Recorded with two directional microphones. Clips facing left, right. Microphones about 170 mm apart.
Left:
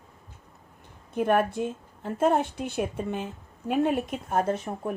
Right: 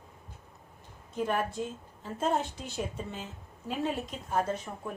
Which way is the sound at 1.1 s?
60° left (ahead or behind).